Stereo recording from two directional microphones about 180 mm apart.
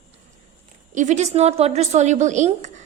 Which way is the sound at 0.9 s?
40° right (ahead or behind).